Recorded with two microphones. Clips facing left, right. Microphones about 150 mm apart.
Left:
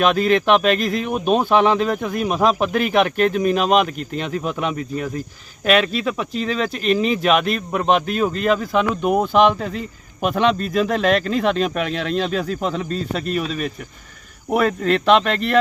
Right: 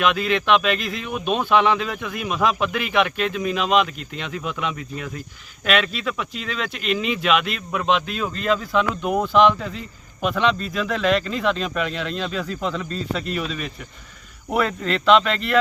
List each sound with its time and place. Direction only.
0.0 s speech: 45° left (ahead or behind); by 12.2 s 60° left (ahead or behind)
12.9 s speech: 50° left (ahead or behind)